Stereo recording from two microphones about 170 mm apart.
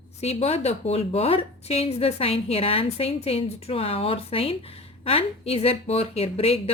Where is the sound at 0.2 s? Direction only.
40° left (ahead or behind).